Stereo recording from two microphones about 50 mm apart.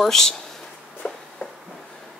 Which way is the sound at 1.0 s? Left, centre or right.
Left.